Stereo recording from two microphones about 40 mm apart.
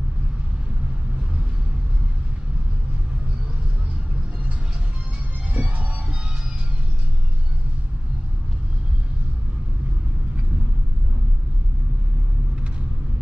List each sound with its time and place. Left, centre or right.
5.5 s music: right